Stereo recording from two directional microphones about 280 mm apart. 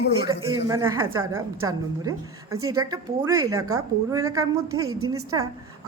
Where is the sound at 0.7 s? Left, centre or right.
Centre.